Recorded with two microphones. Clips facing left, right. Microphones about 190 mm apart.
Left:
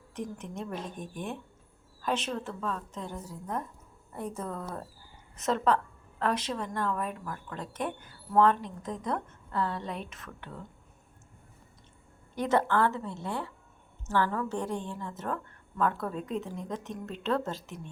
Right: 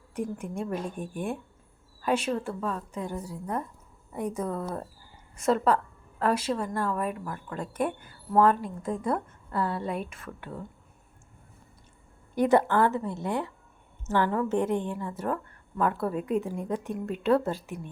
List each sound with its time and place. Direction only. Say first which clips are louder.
0.1 s a woman's voice: right 5 dB; 10° right (ahead or behind)
12.3 s a woman's voice: right 5 dB; 10° right (ahead or behind)